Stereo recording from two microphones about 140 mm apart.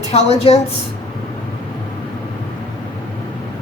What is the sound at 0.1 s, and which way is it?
Speech, 50° left (ahead or behind).